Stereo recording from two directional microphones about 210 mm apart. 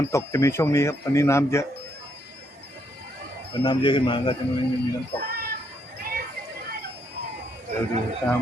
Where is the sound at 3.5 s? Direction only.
20° left (ahead or behind).